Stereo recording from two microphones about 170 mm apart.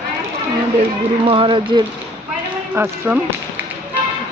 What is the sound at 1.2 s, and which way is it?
Speech, 30° right (ahead or behind).